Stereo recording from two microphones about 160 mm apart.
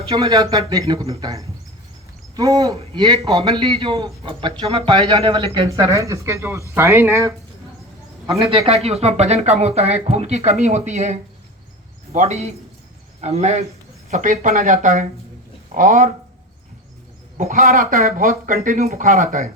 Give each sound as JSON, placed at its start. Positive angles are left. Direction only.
{"t": 0.2, "sound": "a man's voice", "side_deg": -20}
{"t": 8.4, "sound": "speech", "side_deg": -35}
{"t": 17.3, "sound": "speech", "side_deg": -55}
{"t": 18.9, "sound": "speech", "side_deg": -50}